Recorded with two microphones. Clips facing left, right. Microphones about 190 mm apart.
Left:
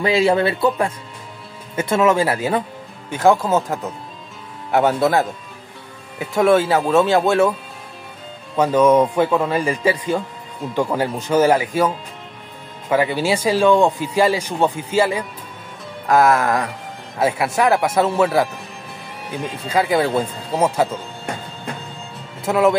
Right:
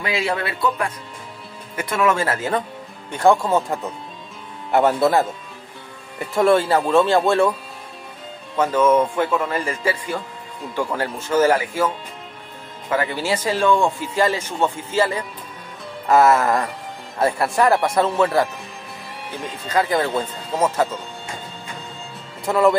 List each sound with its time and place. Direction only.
0.0 s speech: 25° left (ahead or behind)
3.1 s speech: centre (ahead or behind)
8.5 s speech: 15° left (ahead or behind)
12.9 s speech: 15° left (ahead or behind)
16.1 s speech: centre (ahead or behind)
22.4 s speech: centre (ahead or behind)